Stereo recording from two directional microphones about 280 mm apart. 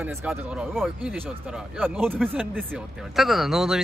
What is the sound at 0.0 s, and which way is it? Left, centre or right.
Speech, centre.